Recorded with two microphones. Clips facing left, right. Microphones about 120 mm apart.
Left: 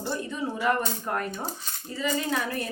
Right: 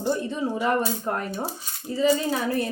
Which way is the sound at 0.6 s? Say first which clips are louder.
Right 1 dB; 30° right (ahead or behind).